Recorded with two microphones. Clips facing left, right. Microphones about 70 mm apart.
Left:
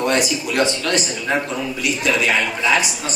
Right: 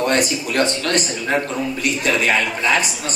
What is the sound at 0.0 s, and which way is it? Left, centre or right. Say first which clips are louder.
A man's voice: even; right.